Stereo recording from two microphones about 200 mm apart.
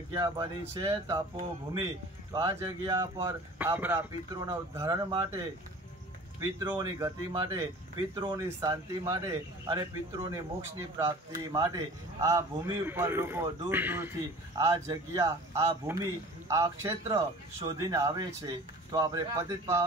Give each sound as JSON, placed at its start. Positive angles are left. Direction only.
{"t": 0.1, "sound": "speech", "side_deg": -15}
{"t": 2.3, "sound": "speech", "side_deg": -20}
{"t": 6.7, "sound": "speech", "side_deg": -15}